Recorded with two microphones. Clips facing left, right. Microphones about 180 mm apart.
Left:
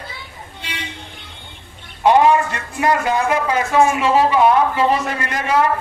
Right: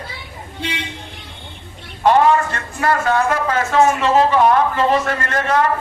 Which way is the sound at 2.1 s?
15° left (ahead or behind).